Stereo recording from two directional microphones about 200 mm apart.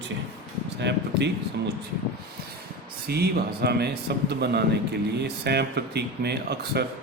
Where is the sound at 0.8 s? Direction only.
60° right (ahead or behind).